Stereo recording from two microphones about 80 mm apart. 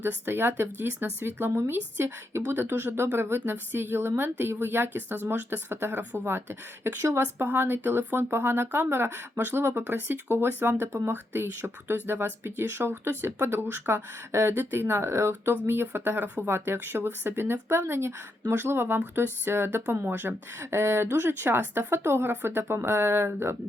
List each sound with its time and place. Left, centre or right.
0.0 s speech: right